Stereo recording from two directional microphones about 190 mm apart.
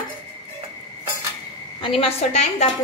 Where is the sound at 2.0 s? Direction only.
35° left (ahead or behind).